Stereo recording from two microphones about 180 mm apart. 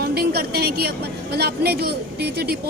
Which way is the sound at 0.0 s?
60° right (ahead or behind).